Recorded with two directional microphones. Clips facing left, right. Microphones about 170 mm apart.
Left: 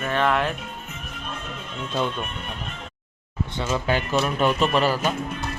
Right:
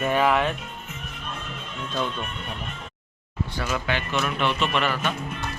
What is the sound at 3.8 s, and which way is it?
Speech, 35° left (ahead or behind).